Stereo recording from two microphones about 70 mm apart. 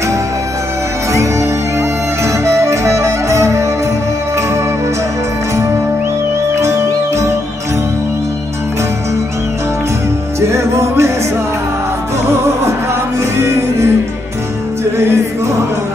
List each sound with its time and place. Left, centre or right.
1.1 s music: right
6.5 s music: right
10.4 s music: right
12.3 s music: right
15.0 s music: right